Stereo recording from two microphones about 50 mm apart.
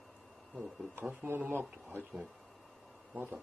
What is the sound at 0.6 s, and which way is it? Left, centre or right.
Speech, right.